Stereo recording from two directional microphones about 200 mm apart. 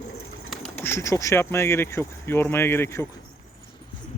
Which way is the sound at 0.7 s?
10° left (ahead or behind).